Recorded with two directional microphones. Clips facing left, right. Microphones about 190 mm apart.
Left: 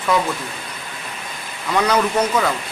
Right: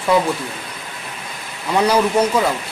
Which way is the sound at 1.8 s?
10° right (ahead or behind).